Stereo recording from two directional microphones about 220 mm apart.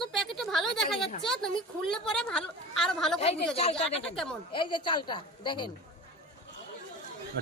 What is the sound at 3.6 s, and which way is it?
A woman's voice, 25° left (ahead or behind).